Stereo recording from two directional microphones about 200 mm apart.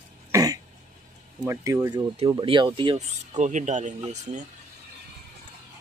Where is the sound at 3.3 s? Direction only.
35° right (ahead or behind).